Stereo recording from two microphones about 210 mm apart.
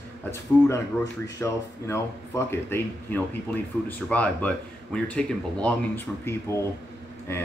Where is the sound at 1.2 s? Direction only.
15° left (ahead or behind).